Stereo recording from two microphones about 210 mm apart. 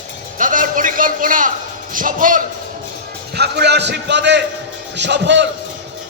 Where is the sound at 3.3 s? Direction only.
50° right (ahead or behind).